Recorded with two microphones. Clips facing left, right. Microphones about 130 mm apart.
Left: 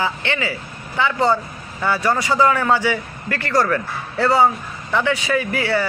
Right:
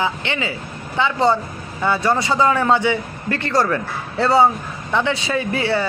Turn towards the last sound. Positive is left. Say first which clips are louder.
# even
turn(degrees=-25)  # may be behind; listen again after turning